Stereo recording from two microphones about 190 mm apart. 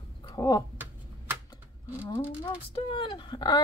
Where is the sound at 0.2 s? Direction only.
20° left (ahead or behind).